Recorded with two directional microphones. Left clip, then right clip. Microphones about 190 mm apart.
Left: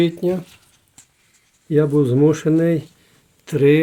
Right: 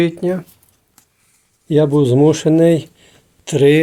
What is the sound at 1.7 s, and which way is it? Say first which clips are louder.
Speech: right 4 dB; 10° right (ahead or behind).